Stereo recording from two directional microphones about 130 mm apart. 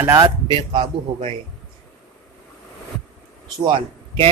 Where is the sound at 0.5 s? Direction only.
40° right (ahead or behind).